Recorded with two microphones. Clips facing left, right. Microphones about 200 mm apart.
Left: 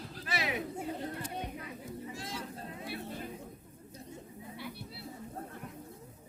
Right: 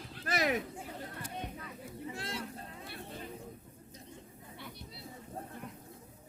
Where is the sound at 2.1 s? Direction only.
60° right (ahead or behind).